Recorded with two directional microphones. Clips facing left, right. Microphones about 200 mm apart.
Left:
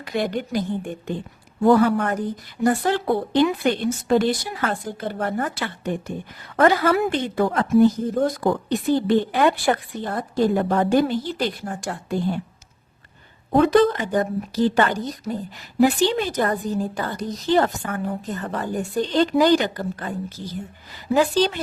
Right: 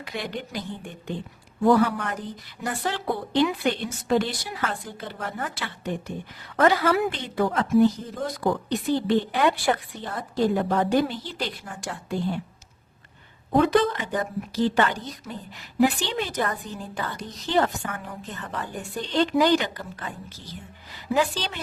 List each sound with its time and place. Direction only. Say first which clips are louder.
0.0 s a woman's voice: left 8 dB; 45° left (ahead or behind)
13.6 s a woman's voice: left 4 dB; 40° left (ahead or behind)